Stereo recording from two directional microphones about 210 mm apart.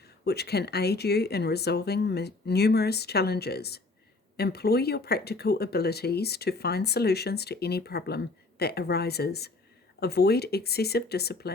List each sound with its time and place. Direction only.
0.3 s speech: 50° left (ahead or behind)